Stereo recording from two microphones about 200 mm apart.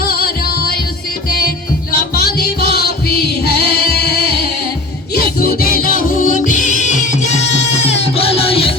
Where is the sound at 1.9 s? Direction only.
50° left (ahead or behind).